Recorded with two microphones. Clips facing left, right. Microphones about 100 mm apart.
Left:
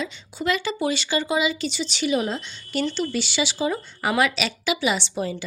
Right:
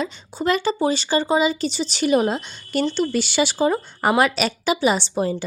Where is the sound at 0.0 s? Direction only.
40° right (ahead or behind).